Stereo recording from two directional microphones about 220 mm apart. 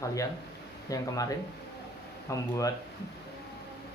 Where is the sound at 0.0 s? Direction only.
15° left (ahead or behind).